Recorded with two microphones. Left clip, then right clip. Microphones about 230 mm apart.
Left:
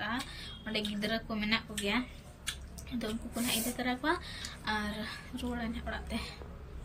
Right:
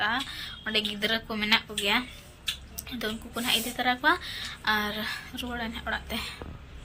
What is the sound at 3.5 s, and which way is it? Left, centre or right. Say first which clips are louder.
Speech: right 9 dB; centre.